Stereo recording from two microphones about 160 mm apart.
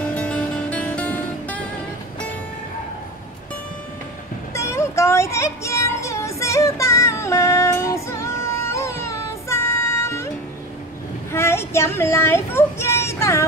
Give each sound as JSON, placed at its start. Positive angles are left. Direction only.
{"t": 0.0, "sound": "music", "side_deg": 10}
{"t": 4.6, "sound": "music", "side_deg": 15}
{"t": 11.3, "sound": "a sound", "side_deg": 15}